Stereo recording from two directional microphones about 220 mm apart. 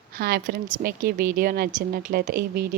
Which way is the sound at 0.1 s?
45° right (ahead or behind).